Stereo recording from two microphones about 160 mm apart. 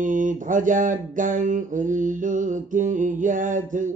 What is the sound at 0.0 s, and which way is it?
Mantra, 55° right (ahead or behind).